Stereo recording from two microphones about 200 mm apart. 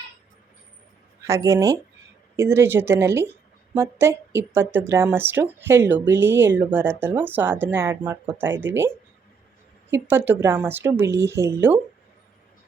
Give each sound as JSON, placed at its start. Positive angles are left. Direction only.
{"t": 1.2, "sound": "speech", "side_deg": -15}
{"t": 9.9, "sound": "speech", "side_deg": -10}